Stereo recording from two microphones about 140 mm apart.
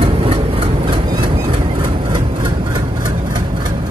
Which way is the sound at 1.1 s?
35° right (ahead or behind).